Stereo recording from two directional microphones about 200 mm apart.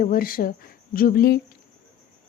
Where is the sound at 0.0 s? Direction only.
45° left (ahead or behind).